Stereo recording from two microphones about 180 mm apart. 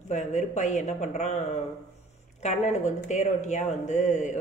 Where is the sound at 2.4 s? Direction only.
40° left (ahead or behind).